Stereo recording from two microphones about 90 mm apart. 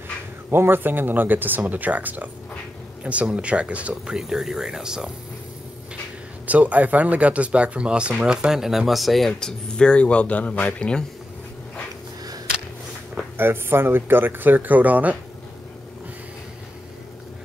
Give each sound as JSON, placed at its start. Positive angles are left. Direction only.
{"t": 0.5, "sound": "speech", "side_deg": -25}
{"t": 6.4, "sound": "speech", "side_deg": -15}
{"t": 13.4, "sound": "speech", "side_deg": -25}